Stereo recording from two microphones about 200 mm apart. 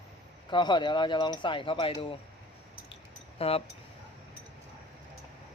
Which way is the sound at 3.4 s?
30° left (ahead or behind).